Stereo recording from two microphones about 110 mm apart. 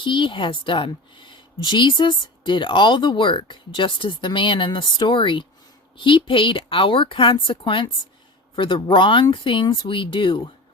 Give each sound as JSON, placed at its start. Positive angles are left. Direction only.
{"t": 0.0, "sound": "a woman's voice", "side_deg": 50}